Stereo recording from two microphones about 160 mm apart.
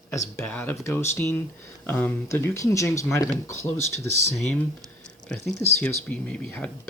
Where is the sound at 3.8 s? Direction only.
90° right.